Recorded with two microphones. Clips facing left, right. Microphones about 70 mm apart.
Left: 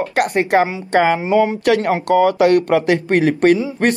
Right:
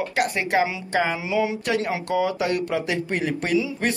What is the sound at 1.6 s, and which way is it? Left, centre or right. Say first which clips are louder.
Speech: left 9 dB; left.